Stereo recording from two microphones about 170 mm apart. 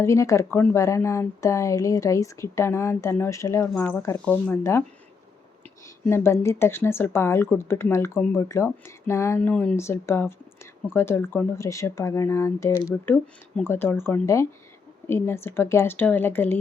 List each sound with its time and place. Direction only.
0.0 s a woman's voice: 15° left (ahead or behind)
6.1 s a woman's voice: 15° left (ahead or behind)